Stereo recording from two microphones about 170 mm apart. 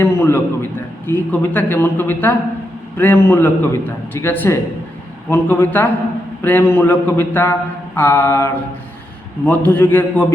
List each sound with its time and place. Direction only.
0.0 s a man's voice: 15° left (ahead or behind)